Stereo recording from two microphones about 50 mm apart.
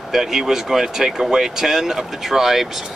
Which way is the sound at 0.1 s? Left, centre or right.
Centre.